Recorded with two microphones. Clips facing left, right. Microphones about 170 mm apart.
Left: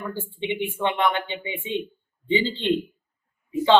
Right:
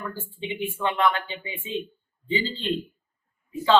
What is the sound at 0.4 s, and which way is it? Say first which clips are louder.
A man's voice: left 3 dB; 20° left (ahead or behind).